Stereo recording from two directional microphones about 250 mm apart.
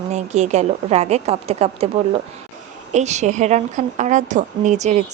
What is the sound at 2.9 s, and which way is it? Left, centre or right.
Speech, right.